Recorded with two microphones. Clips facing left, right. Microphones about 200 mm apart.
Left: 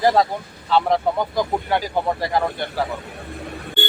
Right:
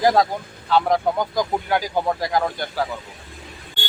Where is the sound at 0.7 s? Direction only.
5° left (ahead or behind).